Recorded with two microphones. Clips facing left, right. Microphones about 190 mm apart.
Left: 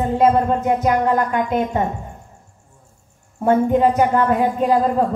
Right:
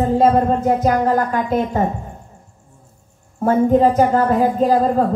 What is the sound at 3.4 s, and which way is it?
A woman's voice, 35° right (ahead or behind).